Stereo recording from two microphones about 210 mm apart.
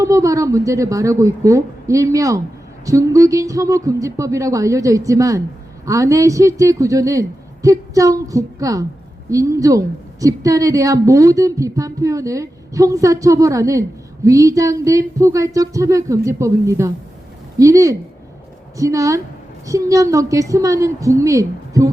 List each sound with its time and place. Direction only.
0.0 s a woman's voice: 15° right (ahead or behind)